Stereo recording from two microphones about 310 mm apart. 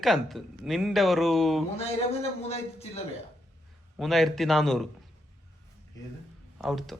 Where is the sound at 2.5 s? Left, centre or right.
Centre.